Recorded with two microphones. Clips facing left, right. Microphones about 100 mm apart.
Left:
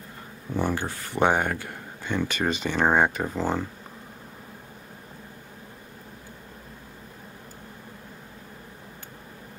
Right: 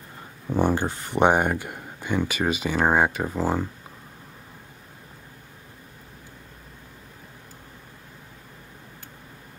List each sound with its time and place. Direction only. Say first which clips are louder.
0.5 s speech: right 4 dB; 20° right (ahead or behind)